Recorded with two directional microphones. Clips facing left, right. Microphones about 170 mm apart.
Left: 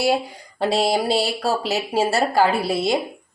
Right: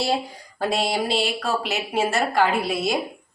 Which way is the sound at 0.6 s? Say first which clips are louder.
Left 4 dB; 35° left (ahead or behind).